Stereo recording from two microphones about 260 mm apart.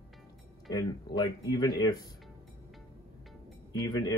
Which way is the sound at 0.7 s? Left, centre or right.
Centre.